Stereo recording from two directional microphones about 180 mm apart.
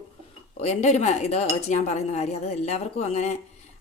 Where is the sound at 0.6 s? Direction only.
40° left (ahead or behind).